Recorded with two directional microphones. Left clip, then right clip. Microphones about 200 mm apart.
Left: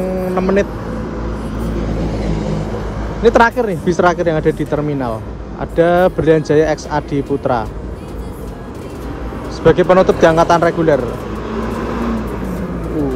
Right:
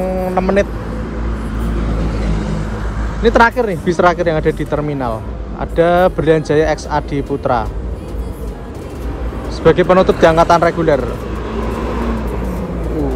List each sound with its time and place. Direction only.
0.0 s vehicle: 5° left (ahead or behind)
1.8 s vehicle: 50° left (ahead or behind)
3.2 s speech: 15° left (ahead or behind)
9.6 s speech: 15° left (ahead or behind)